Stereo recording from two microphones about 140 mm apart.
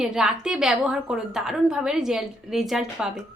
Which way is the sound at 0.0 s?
5° right (ahead or behind).